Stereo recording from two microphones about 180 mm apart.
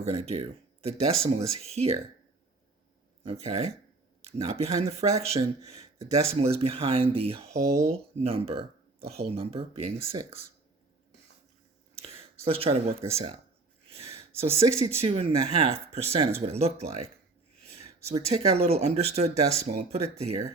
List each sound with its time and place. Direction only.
0.0 s speech: 35° right (ahead or behind)
3.2 s speech: 35° right (ahead or behind)
11.9 s speech: 35° right (ahead or behind)
13.8 s a sound: 35° right (ahead or behind)
14.8 s speech: 35° right (ahead or behind)